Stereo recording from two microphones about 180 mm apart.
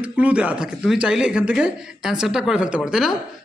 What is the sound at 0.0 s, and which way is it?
Speech, 5° right (ahead or behind).